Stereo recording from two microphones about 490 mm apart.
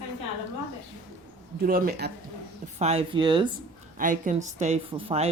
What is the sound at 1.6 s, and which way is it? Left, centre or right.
Speech, centre.